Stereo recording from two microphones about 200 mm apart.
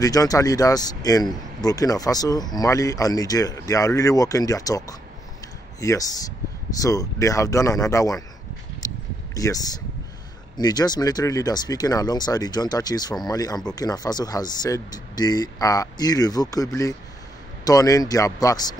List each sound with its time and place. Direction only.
0.0 s speech: 15° left (ahead or behind)
8.8 s a sound: 15° left (ahead or behind)
9.3 s speech: 15° left (ahead or behind)